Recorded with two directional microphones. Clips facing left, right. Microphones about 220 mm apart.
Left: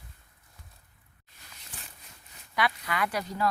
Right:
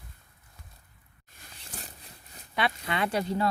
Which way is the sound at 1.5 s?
35° right (ahead or behind).